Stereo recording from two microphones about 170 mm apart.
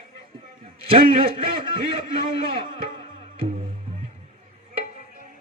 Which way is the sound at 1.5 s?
30° right (ahead or behind).